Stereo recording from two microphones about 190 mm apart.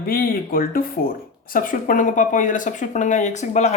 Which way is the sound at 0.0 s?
50° left (ahead or behind).